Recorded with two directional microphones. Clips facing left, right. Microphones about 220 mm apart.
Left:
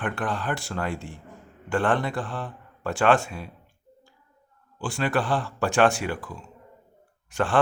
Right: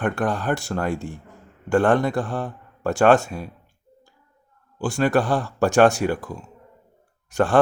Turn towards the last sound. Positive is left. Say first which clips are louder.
# right 5 dB
turn(degrees=-40)  # may be behind; listen again after turning